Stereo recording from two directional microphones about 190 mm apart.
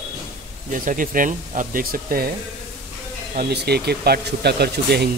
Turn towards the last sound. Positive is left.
turn(degrees=-60)  # may be behind; listen again after turning